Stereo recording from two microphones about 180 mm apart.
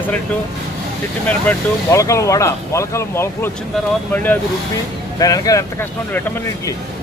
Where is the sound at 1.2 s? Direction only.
15° left (ahead or behind).